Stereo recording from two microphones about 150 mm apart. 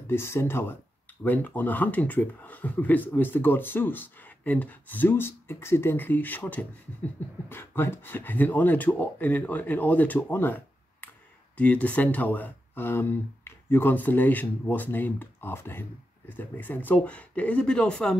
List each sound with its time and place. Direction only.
0.0 s speech: 15° left (ahead or behind)